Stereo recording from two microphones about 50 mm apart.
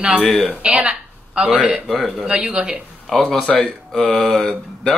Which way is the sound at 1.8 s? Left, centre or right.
Centre.